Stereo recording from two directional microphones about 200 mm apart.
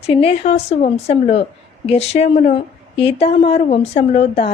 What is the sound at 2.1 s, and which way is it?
A woman's voice, 30° left (ahead or behind).